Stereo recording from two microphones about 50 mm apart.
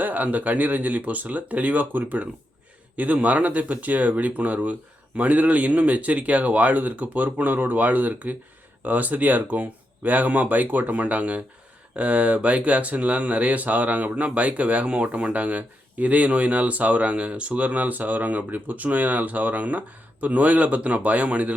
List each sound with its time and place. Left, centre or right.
0.0 s speech: right